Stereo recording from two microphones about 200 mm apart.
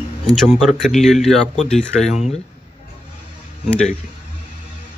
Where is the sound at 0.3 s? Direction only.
Centre (ahead or behind).